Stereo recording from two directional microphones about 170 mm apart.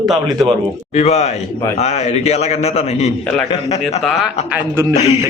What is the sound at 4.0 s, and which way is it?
Speech, centre (ahead or behind).